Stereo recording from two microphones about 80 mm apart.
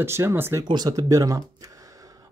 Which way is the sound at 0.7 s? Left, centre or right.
Right.